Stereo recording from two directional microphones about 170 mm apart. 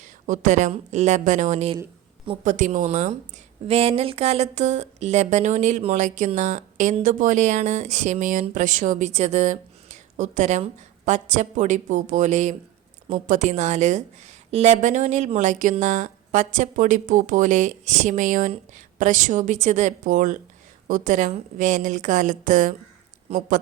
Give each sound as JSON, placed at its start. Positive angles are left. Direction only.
{"t": 0.0, "sound": "a woman's voice", "side_deg": -45}
{"t": 23.3, "sound": "speech", "side_deg": -40}